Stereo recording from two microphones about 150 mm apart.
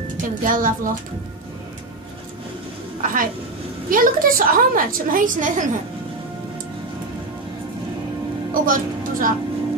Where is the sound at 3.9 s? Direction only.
70° right (ahead or behind).